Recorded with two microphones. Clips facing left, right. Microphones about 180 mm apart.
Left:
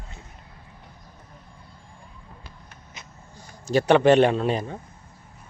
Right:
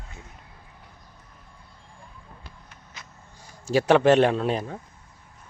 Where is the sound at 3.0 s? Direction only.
20° left (ahead or behind).